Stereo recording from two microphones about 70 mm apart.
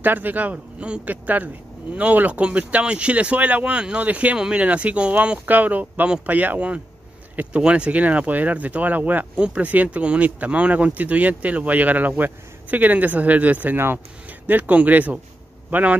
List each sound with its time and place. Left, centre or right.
0.0 s speech: right